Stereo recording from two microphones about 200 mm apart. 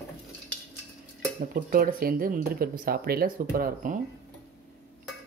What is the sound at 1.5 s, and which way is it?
Speech, 45° right (ahead or behind).